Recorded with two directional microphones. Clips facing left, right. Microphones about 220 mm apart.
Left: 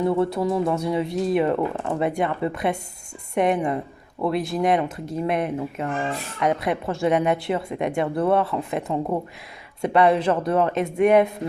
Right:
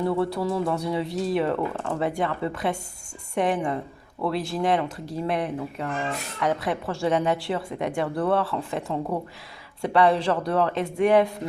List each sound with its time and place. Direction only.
0.0 s speech: 20° left (ahead or behind)